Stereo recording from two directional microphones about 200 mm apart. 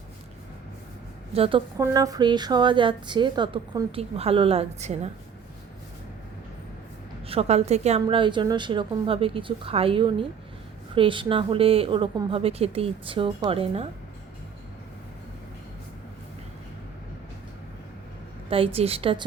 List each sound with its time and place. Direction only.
1.3 s a woman's voice: 30° right (ahead or behind)
7.3 s a woman's voice: 30° right (ahead or behind)
18.5 s a woman's voice: 30° right (ahead or behind)